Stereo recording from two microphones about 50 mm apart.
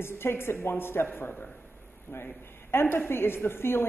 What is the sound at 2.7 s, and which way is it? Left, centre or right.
A woman's voice, left.